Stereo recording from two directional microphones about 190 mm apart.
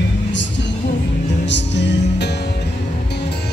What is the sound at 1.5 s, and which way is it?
Music, 65° left (ahead or behind).